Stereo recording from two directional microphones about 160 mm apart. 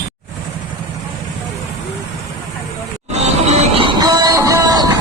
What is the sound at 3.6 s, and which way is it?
Music, 35° right (ahead or behind).